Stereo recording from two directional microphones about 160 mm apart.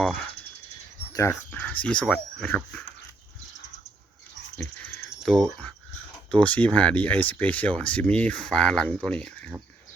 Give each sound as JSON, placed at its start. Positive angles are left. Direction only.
{"t": 1.1, "sound": "speech", "side_deg": 20}
{"t": 4.5, "sound": "a sound", "side_deg": 10}
{"t": 5.2, "sound": "speech", "side_deg": 5}